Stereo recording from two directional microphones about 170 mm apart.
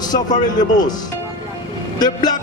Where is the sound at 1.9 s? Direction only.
25° left (ahead or behind).